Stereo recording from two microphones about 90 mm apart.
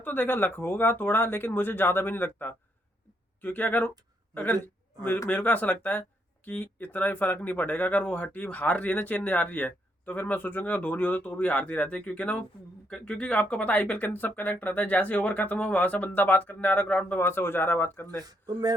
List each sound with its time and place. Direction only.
0.0 s a man's voice: 20° left (ahead or behind)
18.2 s speech: 45° right (ahead or behind)